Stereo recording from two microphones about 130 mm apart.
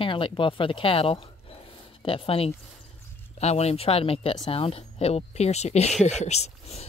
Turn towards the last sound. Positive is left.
turn(degrees=55)  # may be behind; listen again after turning